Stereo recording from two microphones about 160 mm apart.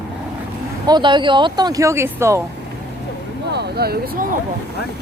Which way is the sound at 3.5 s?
90° right.